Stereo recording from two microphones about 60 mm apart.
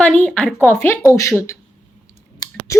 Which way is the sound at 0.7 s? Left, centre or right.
Left.